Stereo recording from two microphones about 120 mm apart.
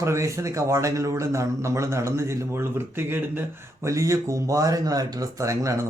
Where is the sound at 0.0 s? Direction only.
25° right (ahead or behind).